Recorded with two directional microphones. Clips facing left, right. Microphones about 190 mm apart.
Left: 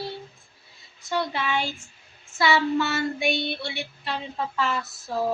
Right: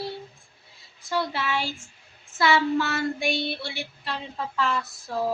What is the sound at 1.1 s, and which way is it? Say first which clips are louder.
A woman's voice: left 1 dB; 5° right (ahead or behind).